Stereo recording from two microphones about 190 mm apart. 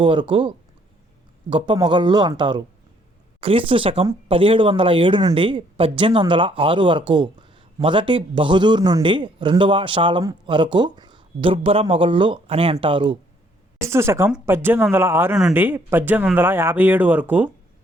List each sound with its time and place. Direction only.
0.0 s speech: 25° right (ahead or behind)
3.7 s speech: 30° right (ahead or behind)
13.8 s speech: 15° right (ahead or behind)